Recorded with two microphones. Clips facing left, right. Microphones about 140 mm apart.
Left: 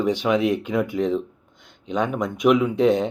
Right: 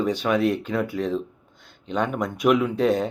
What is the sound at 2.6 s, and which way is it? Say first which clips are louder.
Speech: left 3 dB; 15° left (ahead or behind).